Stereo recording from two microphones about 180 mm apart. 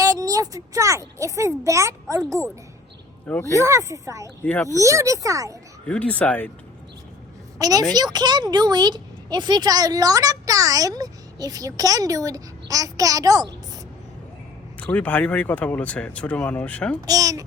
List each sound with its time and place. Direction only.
0.0 s a child's voice: 20° right (ahead or behind)
3.2 s speech: 10° left (ahead or behind)
3.5 s a child's voice: 15° right (ahead or behind)
4.4 s speech: 5° left (ahead or behind)
4.8 s a child's voice: 15° right (ahead or behind)
5.9 s speech: 5° left (ahead or behind)
7.6 s speech: 20° right (ahead or behind)
14.8 s speech: 10° left (ahead or behind)
17.1 s speech: 20° right (ahead or behind)